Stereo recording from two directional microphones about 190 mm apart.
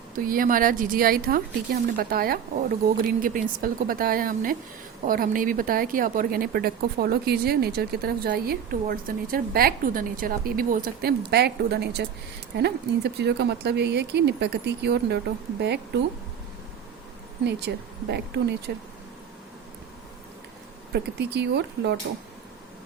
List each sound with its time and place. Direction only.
0.3 s speech: 45° right (ahead or behind)
17.4 s speech: 60° right (ahead or behind)
20.9 s speech: 60° right (ahead or behind)